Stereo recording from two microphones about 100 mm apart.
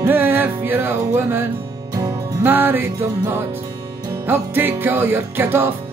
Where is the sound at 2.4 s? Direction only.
20° right (ahead or behind).